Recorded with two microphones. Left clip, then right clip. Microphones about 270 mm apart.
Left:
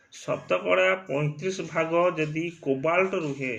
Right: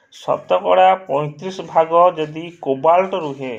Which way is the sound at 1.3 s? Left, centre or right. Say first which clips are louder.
Right 11 dB; right.